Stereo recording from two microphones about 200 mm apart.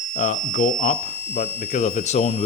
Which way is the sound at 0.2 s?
40° left (ahead or behind).